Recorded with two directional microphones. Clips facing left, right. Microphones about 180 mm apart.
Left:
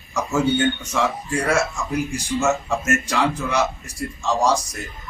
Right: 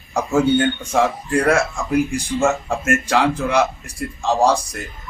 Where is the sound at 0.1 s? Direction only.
55° right (ahead or behind).